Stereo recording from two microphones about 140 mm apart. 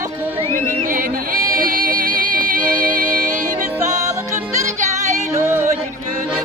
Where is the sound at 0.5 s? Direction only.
75° right (ahead or behind).